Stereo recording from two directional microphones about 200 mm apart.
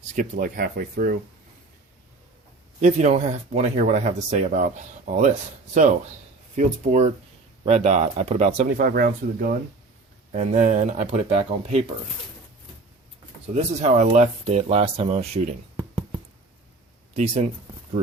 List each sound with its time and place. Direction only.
0.2 s speech: 45° right (ahead or behind)
2.8 s speech: 35° right (ahead or behind)
6.6 s speech: 35° right (ahead or behind)
13.6 s speech: 35° right (ahead or behind)
17.2 s speech: 35° right (ahead or behind)